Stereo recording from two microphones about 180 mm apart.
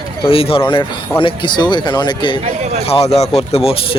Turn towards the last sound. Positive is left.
turn(degrees=35)  # may be behind; listen again after turning